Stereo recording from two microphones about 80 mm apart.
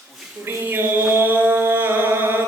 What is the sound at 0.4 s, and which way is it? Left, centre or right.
Mantra, right.